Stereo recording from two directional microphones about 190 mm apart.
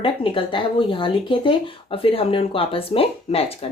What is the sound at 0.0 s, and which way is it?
Speech, 25° left (ahead or behind).